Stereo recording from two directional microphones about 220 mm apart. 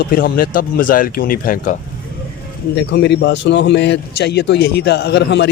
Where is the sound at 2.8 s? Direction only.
50° left (ahead or behind).